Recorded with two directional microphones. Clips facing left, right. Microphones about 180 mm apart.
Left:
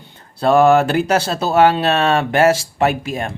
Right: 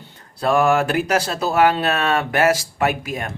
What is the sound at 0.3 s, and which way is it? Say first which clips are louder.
Speech: left 5 dB; 30° left (ahead or behind).